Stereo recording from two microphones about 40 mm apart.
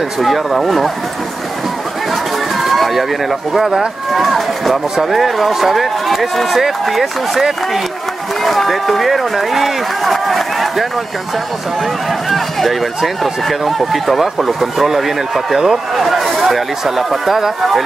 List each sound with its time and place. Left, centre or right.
0.2 s speech: centre
2.5 s speech: centre
12.1 s speech: centre